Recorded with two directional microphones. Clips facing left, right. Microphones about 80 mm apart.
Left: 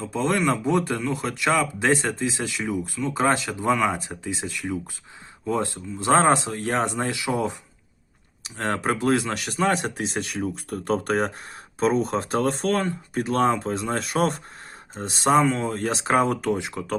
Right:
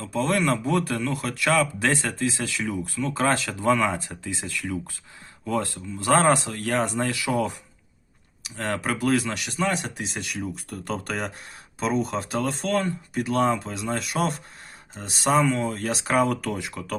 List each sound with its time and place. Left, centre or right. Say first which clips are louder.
0.0 s speech: left 1 dB; left
8.4 s speech: left 2 dB; left